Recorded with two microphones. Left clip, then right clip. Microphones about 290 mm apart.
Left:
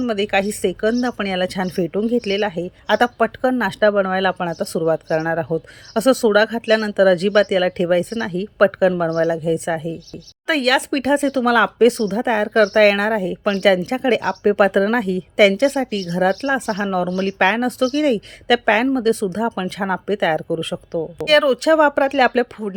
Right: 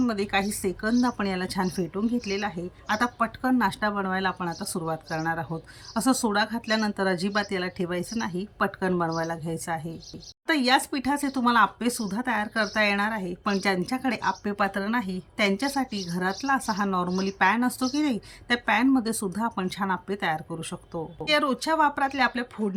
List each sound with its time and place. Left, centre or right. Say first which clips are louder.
0.0 s speech: left 7 dB; centre